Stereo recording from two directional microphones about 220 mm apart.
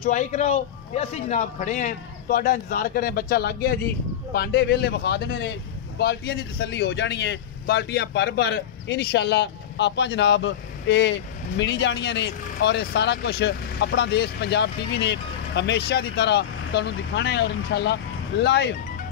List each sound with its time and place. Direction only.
0.0 s a man's voice: 30° left (ahead or behind); by 18.8 s 50° left (ahead or behind)